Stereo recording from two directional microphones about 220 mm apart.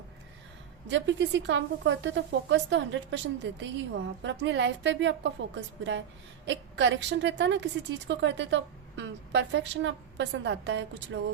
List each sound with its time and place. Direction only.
0.9 s a woman's voice: 55° right (ahead or behind)